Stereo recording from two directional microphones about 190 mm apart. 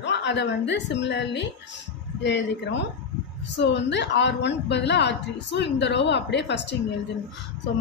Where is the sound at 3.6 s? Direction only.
65° left (ahead or behind).